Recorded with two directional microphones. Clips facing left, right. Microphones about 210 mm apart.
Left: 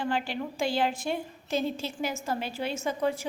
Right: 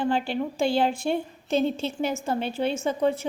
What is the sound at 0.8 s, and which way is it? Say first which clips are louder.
Speech: right 4 dB; 30° right (ahead or behind).